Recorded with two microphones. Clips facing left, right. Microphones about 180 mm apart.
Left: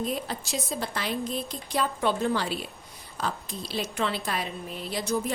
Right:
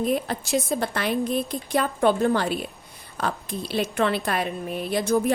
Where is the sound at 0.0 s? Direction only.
55° right (ahead or behind).